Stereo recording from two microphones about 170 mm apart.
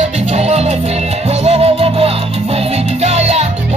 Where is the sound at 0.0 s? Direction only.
40° right (ahead or behind).